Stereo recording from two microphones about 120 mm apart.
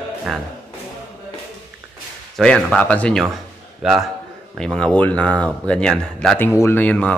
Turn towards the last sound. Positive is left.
turn(degrees=10)  # may be behind; listen again after turning